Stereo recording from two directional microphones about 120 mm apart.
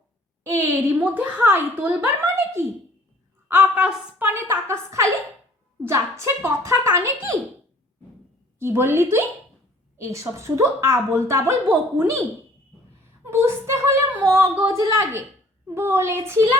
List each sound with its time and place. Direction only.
0.4 s a woman's voice: 20° right (ahead or behind)
8.5 s a woman's voice: 20° right (ahead or behind)
13.2 s a woman's voice: 20° right (ahead or behind)